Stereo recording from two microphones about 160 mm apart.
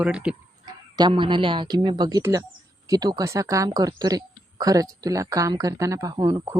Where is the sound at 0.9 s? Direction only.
30° right (ahead or behind).